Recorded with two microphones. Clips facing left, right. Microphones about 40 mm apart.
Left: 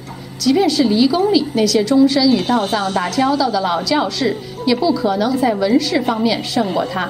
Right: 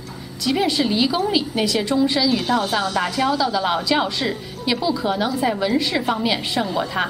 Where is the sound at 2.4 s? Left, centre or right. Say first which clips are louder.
Left 3 dB; left.